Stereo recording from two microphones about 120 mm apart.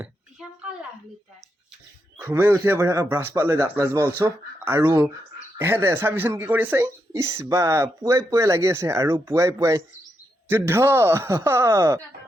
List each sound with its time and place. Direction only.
2.1 s speech: 20° right (ahead or behind)